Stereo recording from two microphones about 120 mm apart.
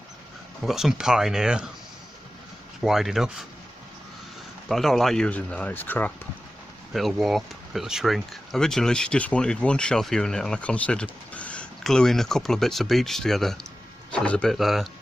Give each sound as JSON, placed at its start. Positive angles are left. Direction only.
{"t": 0.6, "sound": "speech", "side_deg": -5}
{"t": 2.8, "sound": "speech", "side_deg": 0}
{"t": 4.7, "sound": "speech", "side_deg": 0}
{"t": 6.9, "sound": "speech", "side_deg": 0}